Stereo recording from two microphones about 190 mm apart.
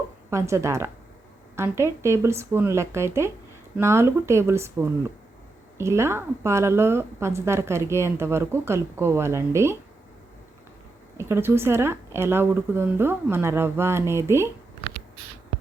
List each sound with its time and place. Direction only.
0.3 s a woman's voice: 15° right (ahead or behind)
11.2 s a woman's voice: 15° right (ahead or behind)
14.8 s a sound: 30° left (ahead or behind)